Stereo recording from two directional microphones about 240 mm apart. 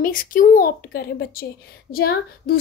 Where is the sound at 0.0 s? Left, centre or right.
Left.